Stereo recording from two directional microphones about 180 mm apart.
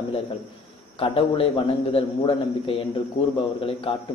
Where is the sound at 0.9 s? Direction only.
30° left (ahead or behind).